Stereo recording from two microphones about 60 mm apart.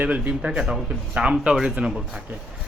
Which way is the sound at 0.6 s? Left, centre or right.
Centre.